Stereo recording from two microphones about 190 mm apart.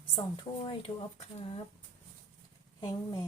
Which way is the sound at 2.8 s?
20° left (ahead or behind).